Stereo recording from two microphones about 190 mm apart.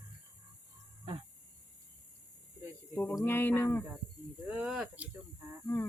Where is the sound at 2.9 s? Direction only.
15° left (ahead or behind).